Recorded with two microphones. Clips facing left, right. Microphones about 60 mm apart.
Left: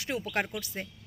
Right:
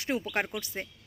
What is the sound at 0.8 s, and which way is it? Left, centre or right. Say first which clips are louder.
Speech: right 1 dB; centre.